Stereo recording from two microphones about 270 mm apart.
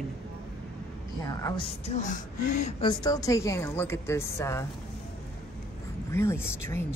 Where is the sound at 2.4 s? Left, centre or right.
Left.